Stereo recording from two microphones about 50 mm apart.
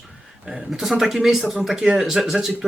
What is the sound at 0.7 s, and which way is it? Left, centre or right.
Speech, centre.